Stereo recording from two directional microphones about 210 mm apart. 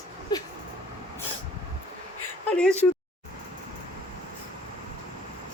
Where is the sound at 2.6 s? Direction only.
5° left (ahead or behind).